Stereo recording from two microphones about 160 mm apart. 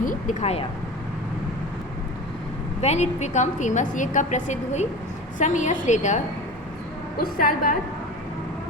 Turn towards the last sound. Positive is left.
turn(degrees=60)  # may be behind; listen again after turning